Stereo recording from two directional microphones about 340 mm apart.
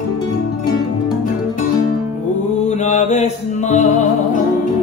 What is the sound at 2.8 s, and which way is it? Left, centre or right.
Mantra, left.